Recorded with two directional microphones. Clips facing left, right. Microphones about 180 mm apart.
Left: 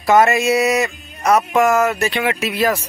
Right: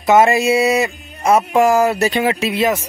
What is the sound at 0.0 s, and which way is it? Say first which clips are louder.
Speech: right 1 dB; 25° right (ahead or behind).